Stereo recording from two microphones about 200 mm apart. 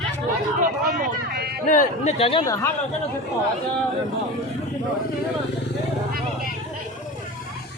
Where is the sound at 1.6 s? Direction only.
40° left (ahead or behind).